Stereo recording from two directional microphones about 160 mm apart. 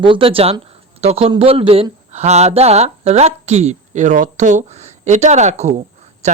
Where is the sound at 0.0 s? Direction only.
35° right (ahead or behind).